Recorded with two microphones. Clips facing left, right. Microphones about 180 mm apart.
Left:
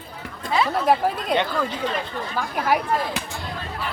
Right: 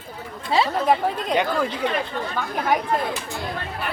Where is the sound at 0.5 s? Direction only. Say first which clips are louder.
Right 1 dB; 30° right (ahead or behind).